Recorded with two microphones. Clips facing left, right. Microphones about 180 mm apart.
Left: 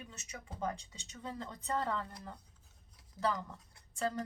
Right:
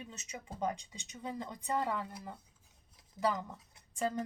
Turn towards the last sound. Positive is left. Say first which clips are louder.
# right 1 dB
turn(degrees=-15)  # may be behind; listen again after turning